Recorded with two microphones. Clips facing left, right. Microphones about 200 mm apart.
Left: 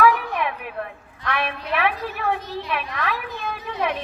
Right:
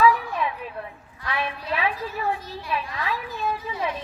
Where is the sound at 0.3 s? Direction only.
70° left (ahead or behind).